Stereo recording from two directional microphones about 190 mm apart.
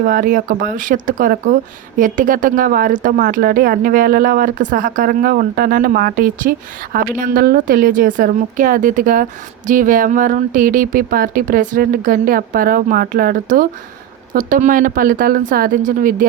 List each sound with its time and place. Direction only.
0.0 s speech: 45° right (ahead or behind)